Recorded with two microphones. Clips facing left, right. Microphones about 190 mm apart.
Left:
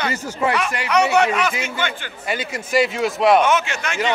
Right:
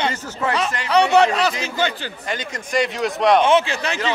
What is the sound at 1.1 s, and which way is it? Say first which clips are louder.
Speech: right 2 dB; 35° right (ahead or behind).